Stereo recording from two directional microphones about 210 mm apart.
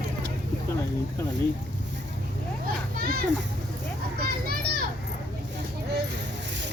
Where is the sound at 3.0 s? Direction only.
45° right (ahead or behind).